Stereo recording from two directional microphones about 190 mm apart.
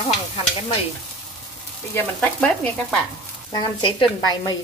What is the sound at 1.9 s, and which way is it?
Sizzle, 5° left (ahead or behind).